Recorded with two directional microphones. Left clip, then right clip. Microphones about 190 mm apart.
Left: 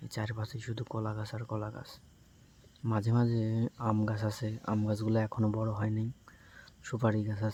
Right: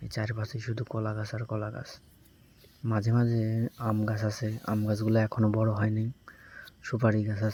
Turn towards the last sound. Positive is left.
turn(degrees=-15)  # may be behind; listen again after turning